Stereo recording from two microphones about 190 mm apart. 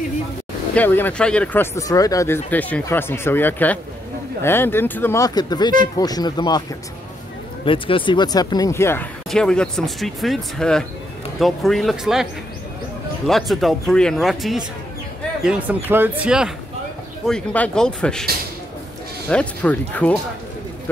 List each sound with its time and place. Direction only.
0.7 s speech: 10° left (ahead or behind)
7.6 s speech: 25° left (ahead or behind); by 12.3 s centre (ahead or behind)
13.3 s speech: centre (ahead or behind)
19.2 s speech: 5° left (ahead or behind)